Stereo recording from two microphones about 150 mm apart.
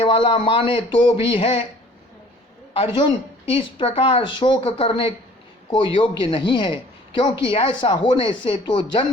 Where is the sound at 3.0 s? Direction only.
35° left (ahead or behind).